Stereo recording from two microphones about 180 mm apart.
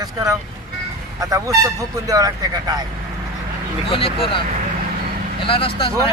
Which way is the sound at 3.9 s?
30° left (ahead or behind).